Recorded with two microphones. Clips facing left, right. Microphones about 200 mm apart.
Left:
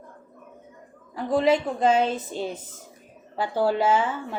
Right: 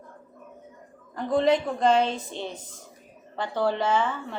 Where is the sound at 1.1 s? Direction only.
5° left (ahead or behind).